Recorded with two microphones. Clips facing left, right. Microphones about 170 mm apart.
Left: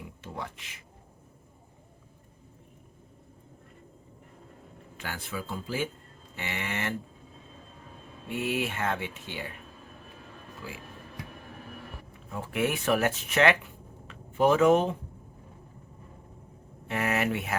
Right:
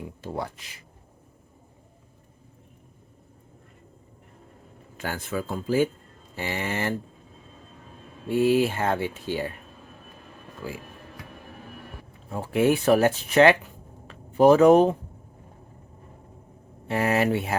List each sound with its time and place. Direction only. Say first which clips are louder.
0.2 s speech: right 7 dB; 35° right (ahead or behind)
4.9 s speech: right 7 dB; 45° right (ahead or behind)
8.3 s speech: right 10 dB; 35° right (ahead or behind)
10.6 s speech: right 7 dB; 45° right (ahead or behind)
12.3 s speech: right 8 dB; 30° right (ahead or behind)
16.9 s speech: right 6 dB; 30° right (ahead or behind)